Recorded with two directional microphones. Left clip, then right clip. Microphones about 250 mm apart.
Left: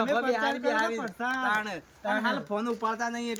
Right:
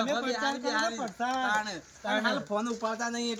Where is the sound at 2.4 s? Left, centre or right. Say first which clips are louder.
Left 2 dB; centre.